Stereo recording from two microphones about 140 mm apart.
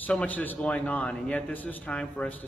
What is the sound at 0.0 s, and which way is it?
A man's voice, 10° left (ahead or behind).